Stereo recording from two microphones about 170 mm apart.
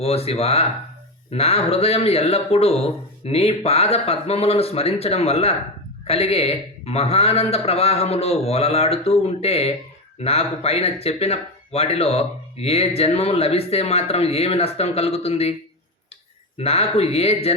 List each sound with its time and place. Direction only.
0.0 s speech: 35° left (ahead or behind)
16.6 s speech: 35° left (ahead or behind)